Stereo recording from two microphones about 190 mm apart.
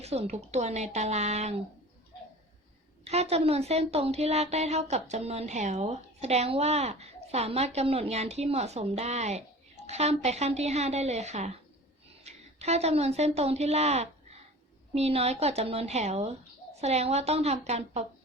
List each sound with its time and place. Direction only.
0.0 s a woman's voice: 35° right (ahead or behind)
3.0 s a woman's voice: 35° right (ahead or behind)